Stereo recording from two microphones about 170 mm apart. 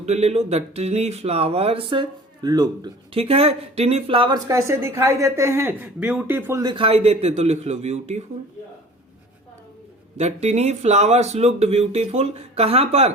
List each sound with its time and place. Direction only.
0.0 s speech: 40° right (ahead or behind)
10.2 s speech: 40° right (ahead or behind)